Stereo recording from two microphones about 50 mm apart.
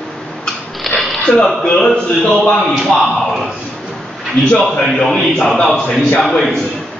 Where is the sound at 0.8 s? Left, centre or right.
Centre.